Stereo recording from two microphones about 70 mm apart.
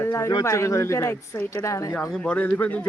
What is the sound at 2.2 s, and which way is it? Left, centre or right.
Speech, left.